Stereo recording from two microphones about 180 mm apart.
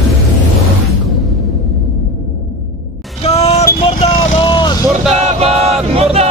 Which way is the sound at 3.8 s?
30° left (ahead or behind).